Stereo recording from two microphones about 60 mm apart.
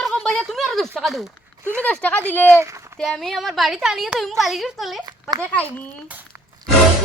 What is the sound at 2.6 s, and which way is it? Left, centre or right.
Speech, right.